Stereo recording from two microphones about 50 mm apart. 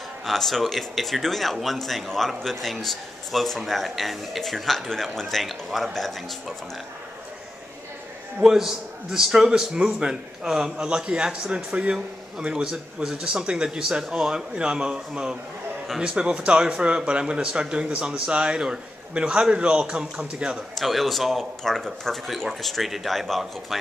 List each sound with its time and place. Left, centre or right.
0.2 s speech: centre
8.4 s speech: centre
10.9 s speech: right
20.7 s speech: centre